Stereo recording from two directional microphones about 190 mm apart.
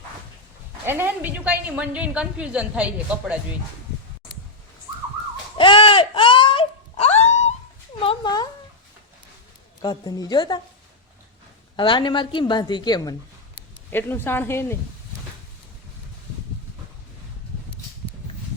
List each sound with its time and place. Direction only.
0.9 s a woman's voice: 10° right (ahead or behind)
5.5 s a sound: 25° left (ahead or behind)
8.0 s cat: 25° left (ahead or behind)
9.8 s a woman's voice: 20° left (ahead or behind)
11.8 s a woman's voice: 25° left (ahead or behind)
13.9 s a woman's voice: 10° left (ahead or behind)